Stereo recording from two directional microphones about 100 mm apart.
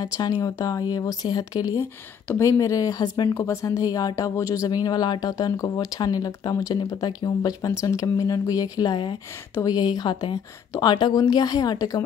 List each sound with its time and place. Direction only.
0.0 s speech: 40° left (ahead or behind)
1.8 s speech: 25° left (ahead or behind)
4.8 s a woman's voice: 45° left (ahead or behind)